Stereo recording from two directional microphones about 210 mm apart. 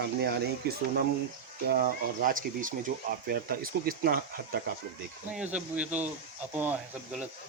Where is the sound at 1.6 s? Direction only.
45° right (ahead or behind).